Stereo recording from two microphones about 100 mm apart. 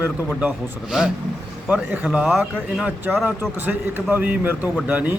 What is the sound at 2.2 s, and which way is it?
Speech, centre (ahead or behind).